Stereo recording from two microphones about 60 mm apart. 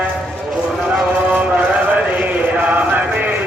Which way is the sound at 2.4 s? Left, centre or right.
Right.